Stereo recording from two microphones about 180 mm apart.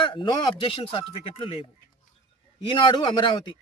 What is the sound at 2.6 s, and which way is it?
Speech, 25° left (ahead or behind).